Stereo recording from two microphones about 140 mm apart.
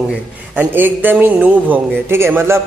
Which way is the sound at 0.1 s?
15° right (ahead or behind).